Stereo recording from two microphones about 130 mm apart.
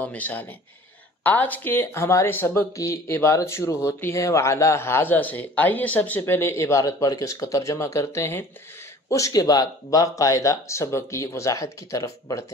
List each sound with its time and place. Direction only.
0.0 s a man's voice: 10° left (ahead or behind)